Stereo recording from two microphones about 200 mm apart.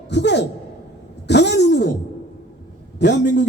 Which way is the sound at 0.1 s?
60° left (ahead or behind).